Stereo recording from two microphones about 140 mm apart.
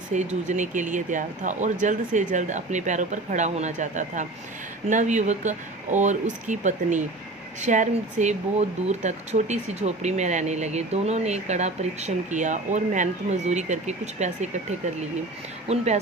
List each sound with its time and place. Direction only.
0.1 s speech: 55° right (ahead or behind)
15.6 s speech: 50° right (ahead or behind)